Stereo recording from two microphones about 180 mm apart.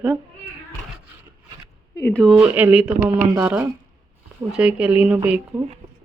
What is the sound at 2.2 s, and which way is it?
Speech, 5° right (ahead or behind).